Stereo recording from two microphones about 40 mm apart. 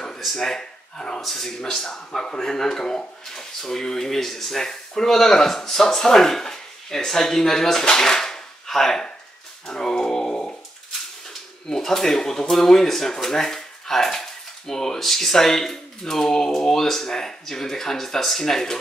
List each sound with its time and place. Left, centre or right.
0.2 s speech: centre
1.2 s speech: centre
10.3 s a sound: left
11.6 s speech: centre